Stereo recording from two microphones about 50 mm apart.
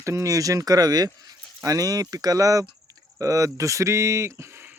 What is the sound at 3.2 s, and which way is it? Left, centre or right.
Speech, right.